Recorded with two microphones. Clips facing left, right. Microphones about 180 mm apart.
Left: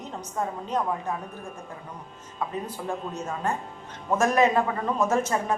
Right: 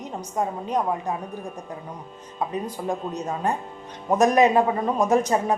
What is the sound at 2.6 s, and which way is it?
A woman's voice, 15° right (ahead or behind).